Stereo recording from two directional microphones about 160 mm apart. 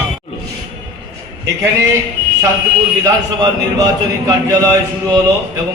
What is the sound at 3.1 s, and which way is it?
Speech, 25° right (ahead or behind).